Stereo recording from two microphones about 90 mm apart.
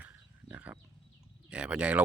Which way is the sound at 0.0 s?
15° right (ahead or behind).